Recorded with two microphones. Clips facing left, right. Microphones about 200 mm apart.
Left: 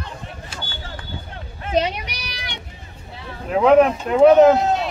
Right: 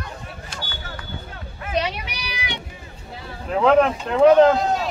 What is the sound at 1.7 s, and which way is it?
Children playing, 45° left (ahead or behind).